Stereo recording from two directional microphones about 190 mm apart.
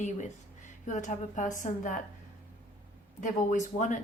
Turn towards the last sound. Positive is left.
turn(degrees=40)  # may be behind; listen again after turning